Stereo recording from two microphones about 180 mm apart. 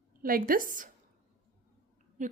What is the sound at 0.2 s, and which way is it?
Speech, 55° right (ahead or behind).